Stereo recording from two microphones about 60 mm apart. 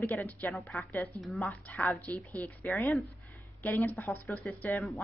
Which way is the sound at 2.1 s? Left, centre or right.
Left.